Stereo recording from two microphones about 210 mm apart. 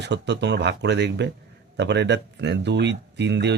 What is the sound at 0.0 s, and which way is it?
Speech, 55° right (ahead or behind).